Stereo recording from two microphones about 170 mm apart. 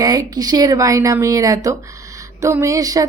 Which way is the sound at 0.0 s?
20° right (ahead or behind).